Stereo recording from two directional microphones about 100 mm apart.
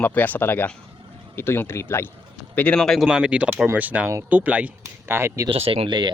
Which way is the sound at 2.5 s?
10° left (ahead or behind).